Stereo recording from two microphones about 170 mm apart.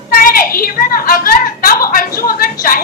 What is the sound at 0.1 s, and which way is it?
A woman's voice, 55° left (ahead or behind).